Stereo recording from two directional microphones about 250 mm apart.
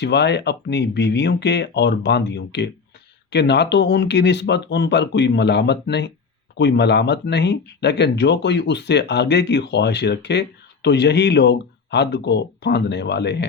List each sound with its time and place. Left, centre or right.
0.0 s speech: left